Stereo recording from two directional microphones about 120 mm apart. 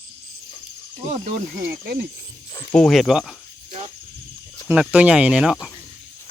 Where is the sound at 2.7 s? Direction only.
5° left (ahead or behind).